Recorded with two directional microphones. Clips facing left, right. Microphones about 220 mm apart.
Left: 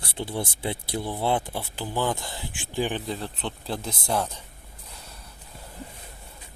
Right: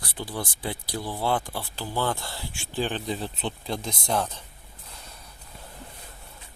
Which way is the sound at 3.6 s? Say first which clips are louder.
Left 1 dB; 5° left (ahead or behind).